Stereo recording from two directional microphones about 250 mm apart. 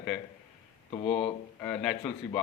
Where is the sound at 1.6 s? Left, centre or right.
Centre.